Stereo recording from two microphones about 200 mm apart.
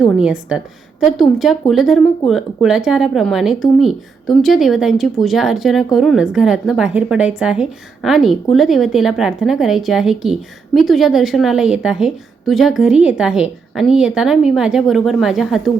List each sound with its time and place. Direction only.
0.2 s speech: 5° right (ahead or behind)